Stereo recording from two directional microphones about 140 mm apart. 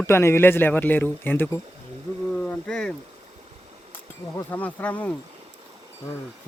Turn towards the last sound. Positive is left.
turn(degrees=10)  # may be behind; listen again after turning